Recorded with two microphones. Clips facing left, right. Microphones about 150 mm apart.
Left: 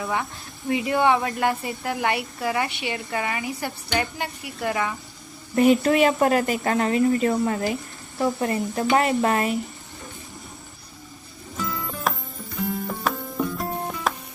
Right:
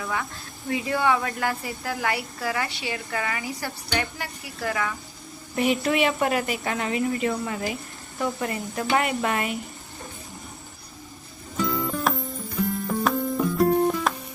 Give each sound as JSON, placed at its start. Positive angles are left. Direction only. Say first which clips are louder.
{"t": 0.0, "sound": "a woman's voice", "louder": "left 3 dB", "side_deg": 25}
{"t": 5.5, "sound": "speech", "louder": "left 5 dB", "side_deg": 40}
{"t": 11.5, "sound": "music", "louder": "right 5 dB", "side_deg": 0}